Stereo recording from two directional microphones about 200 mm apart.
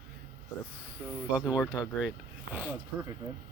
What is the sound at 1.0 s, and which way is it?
Speech, 10° right (ahead or behind).